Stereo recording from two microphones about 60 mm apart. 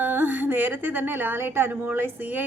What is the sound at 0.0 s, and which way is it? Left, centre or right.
A woman's voice, right.